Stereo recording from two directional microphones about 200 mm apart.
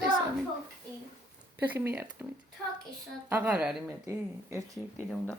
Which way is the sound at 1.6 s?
10° right (ahead or behind).